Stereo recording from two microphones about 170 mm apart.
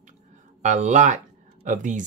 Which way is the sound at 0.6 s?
45° right (ahead or behind).